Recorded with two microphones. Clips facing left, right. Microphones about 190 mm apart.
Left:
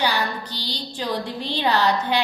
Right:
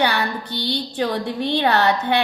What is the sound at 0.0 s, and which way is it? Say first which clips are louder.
A woman's voice: right 3 dB; 60° right (ahead or behind).